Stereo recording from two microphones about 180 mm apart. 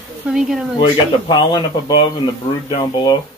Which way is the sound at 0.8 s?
25° left (ahead or behind).